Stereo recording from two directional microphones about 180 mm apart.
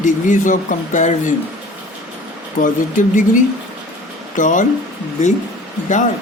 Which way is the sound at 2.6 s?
45° left (ahead or behind).